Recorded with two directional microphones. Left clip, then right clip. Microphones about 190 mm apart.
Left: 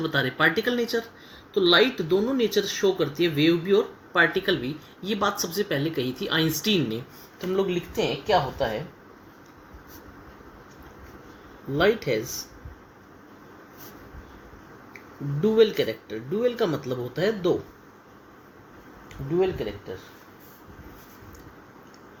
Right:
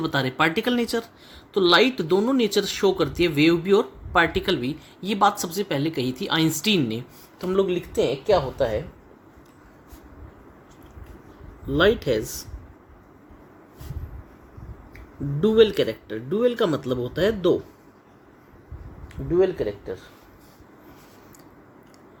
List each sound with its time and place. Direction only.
0.0 s speech: 60° right (ahead or behind)
11.8 s speech: 65° right (ahead or behind)
15.4 s speech: 65° right (ahead or behind)